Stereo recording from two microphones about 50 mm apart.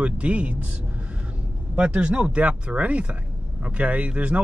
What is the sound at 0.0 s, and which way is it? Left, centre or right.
Speech, right.